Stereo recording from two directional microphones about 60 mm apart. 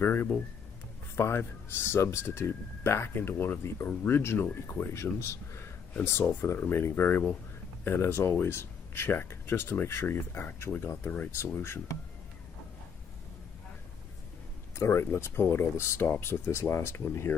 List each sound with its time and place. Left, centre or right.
0.0 s speech: left
2.2 s speech: left
6.6 s speech: left
14.8 s speech: left